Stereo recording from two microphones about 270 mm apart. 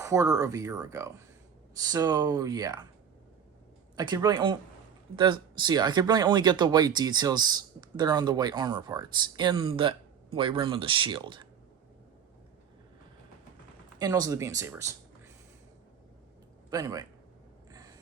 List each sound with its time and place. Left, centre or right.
0.0 s speech: centre
3.9 s speech: centre
14.0 s speech: centre
16.6 s a man's voice: centre
17.7 s a sound: centre